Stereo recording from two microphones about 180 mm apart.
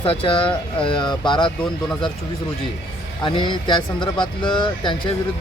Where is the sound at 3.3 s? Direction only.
25° left (ahead or behind).